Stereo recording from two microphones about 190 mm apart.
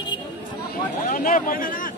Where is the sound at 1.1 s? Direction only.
45° left (ahead or behind).